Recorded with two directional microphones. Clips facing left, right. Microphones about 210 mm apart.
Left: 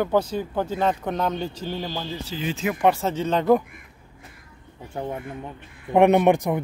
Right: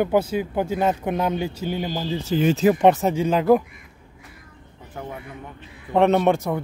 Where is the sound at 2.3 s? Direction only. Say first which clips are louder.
Right 10 dB; 45° right (ahead or behind).